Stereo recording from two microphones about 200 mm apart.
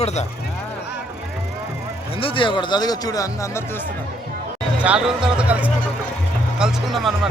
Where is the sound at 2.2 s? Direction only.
25° left (ahead or behind).